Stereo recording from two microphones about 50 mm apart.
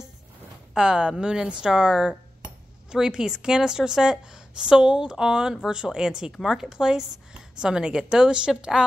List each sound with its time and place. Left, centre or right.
0.7 s a woman's voice: centre